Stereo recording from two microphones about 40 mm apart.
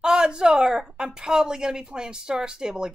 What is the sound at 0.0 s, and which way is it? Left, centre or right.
Speech, centre.